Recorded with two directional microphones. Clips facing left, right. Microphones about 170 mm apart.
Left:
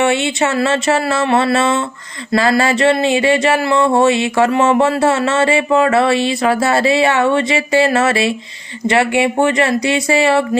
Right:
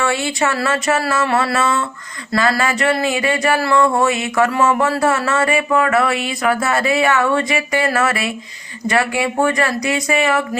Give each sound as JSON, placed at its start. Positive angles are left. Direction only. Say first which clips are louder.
{"t": 0.0, "sound": "speech", "louder": "left 4 dB", "side_deg": 25}